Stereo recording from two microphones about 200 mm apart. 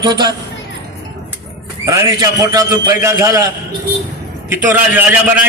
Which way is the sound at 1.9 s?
15° right (ahead or behind).